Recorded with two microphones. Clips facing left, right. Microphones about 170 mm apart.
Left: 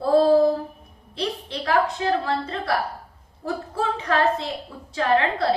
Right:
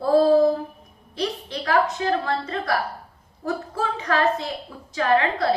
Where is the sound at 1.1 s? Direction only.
30° left (ahead or behind).